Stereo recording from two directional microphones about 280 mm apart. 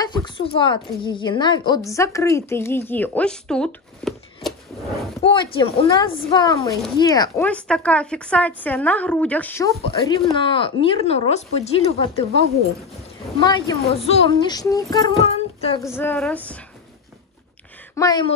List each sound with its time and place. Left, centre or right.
0.0 s a woman's voice: centre
5.2 s speech: centre
13.5 s speech: centre
15.9 s speech: centre
17.9 s speech: centre